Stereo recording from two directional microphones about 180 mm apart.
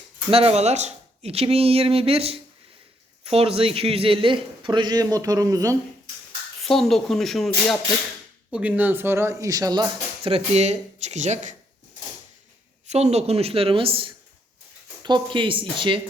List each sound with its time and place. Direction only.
0.3 s a man's voice: 35° right (ahead or behind)
6.6 s speech: centre (ahead or behind); by 9.9 s 20° right (ahead or behind)
10.2 s speech: 35° right (ahead or behind)
12.9 s a man's voice: 35° right (ahead or behind)